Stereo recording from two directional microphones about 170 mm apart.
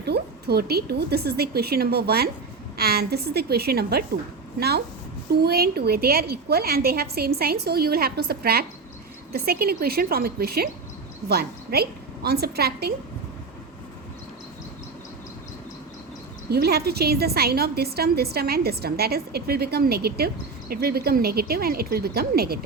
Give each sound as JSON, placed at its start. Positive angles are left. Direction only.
{"t": 0.0, "sound": "a woman's voice", "side_deg": -70}
{"t": 5.3, "sound": "a woman's voice", "side_deg": -70}
{"t": 16.5, "sound": "a woman's voice", "side_deg": -70}